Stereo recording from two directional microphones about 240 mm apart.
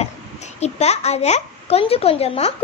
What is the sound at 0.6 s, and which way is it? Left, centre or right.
A child's voice, left.